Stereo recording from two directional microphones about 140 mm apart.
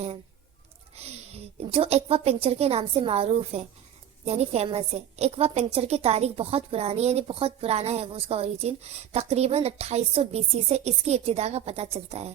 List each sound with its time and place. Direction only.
0.9 s a woman's voice: 45° right (ahead or behind)